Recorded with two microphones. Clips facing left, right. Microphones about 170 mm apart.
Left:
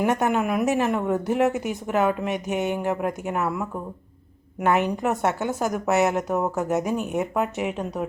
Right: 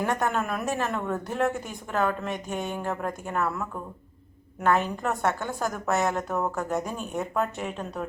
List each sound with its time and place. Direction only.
0.0 s a woman's voice: 15° left (ahead or behind)